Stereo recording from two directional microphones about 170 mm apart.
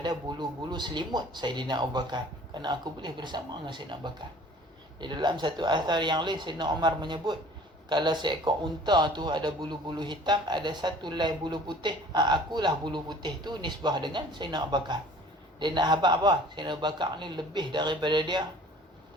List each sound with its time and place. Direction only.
0.0 s speech: 25° right (ahead or behind)